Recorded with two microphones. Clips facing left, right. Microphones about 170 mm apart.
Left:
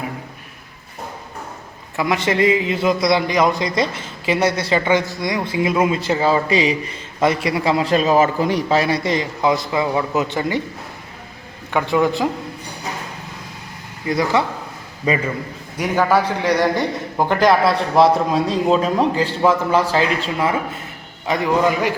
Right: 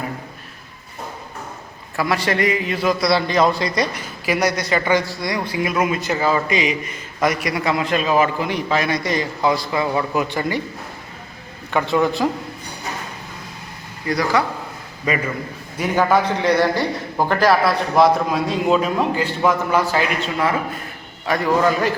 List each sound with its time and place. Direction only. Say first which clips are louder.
2.0 s a man's voice: left 2 dB; 20° left (ahead or behind)
11.7 s a man's voice: left 1 dB; 15° left (ahead or behind)
14.1 s a man's voice: left 1 dB; 20° left (ahead or behind)
15.8 s a man's voice: even; 10° left (ahead or behind)